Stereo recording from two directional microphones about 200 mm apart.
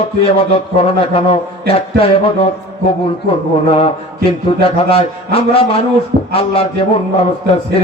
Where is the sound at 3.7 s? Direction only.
25° left (ahead or behind).